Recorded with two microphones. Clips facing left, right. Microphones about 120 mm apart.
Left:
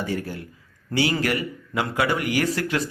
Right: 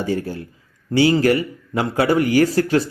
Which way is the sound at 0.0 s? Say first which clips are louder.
Right 5 dB; 30° right (ahead or behind).